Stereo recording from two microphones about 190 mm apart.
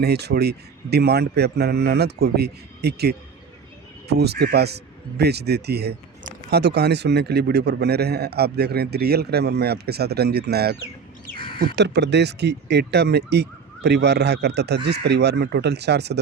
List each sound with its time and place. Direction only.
0.0 s a man's voice: 60° right (ahead or behind)